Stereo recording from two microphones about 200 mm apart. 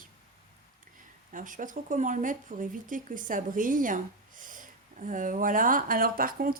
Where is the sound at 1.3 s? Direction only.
40° right (ahead or behind).